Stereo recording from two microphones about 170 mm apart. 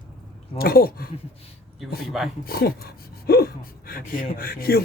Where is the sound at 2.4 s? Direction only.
65° left (ahead or behind).